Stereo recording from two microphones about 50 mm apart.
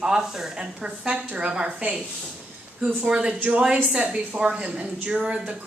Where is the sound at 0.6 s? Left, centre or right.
Right.